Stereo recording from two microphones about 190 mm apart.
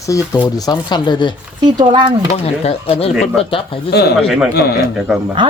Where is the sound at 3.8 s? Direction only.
60° left (ahead or behind).